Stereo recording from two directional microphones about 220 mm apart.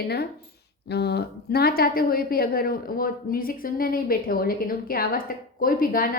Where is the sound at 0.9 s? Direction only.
50° left (ahead or behind).